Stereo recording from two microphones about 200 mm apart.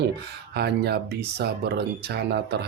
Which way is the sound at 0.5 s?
55° right (ahead or behind).